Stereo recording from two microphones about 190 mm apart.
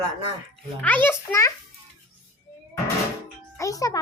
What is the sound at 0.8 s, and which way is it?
Speech, 10° left (ahead or behind).